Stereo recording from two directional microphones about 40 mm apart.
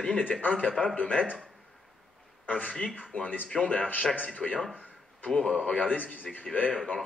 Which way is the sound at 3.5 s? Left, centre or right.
Left.